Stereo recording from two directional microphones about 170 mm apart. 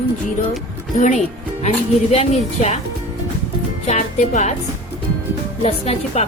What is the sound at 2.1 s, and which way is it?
Speech, 35° left (ahead or behind).